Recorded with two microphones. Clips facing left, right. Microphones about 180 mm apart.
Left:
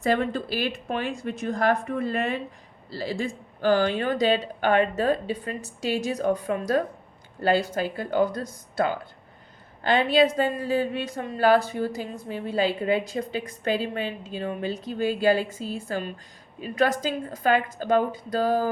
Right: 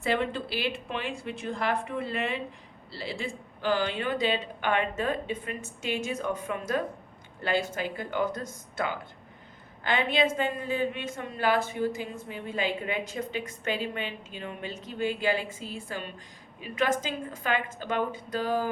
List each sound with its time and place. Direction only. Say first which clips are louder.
0.0 s a woman's voice: left 4 dB; 40° left (ahead or behind)